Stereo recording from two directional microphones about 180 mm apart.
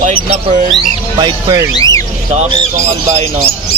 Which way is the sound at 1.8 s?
20° left (ahead or behind).